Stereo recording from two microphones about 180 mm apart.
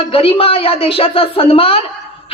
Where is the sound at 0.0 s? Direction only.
30° left (ahead or behind).